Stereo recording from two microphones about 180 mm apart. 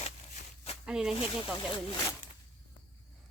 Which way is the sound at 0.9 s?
5° right (ahead or behind).